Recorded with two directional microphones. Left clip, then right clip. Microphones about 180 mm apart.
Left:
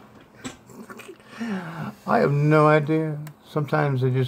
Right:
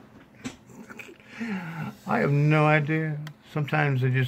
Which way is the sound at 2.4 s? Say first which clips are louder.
Left 4 dB; 15° right (ahead or behind).